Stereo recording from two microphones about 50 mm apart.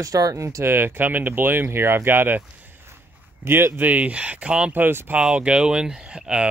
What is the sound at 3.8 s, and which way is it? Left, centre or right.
Speech, right.